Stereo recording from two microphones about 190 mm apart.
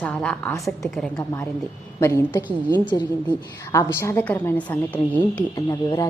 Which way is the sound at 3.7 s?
15° left (ahead or behind).